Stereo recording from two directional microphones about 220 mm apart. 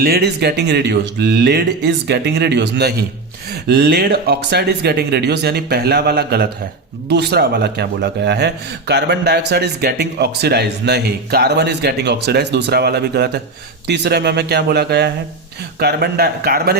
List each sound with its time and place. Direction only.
0.0 s speech: 45° right (ahead or behind)